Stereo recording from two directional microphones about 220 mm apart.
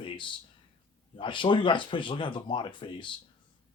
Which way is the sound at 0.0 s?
25° left (ahead or behind).